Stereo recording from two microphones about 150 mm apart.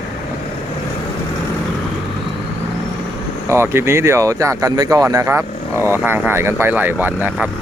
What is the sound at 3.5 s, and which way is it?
Speech, 15° right (ahead or behind).